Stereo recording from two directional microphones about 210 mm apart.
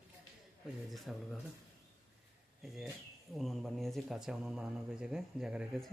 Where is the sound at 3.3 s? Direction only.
Centre (ahead or behind).